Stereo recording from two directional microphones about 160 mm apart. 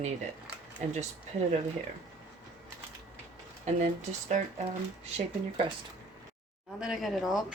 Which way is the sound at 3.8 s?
50° right (ahead or behind).